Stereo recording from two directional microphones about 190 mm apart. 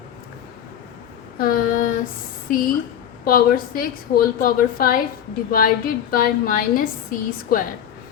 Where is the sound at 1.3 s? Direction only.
50° left (ahead or behind).